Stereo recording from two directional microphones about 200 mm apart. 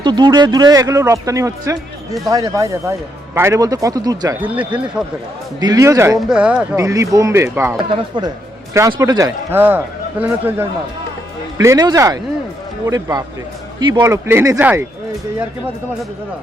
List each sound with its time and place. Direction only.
0.0 s a man's voice: 20° right (ahead or behind)
4.4 s a man's voice: 5° right (ahead or behind)
5.5 s a man's voice: 20° right (ahead or behind)
6.1 s speech: 5° right (ahead or behind)
6.7 s a man's voice: 15° right (ahead or behind)